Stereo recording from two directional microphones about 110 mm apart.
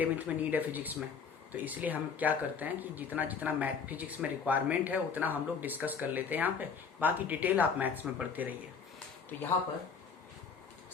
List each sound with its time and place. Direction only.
0.0 s speech: 15° right (ahead or behind)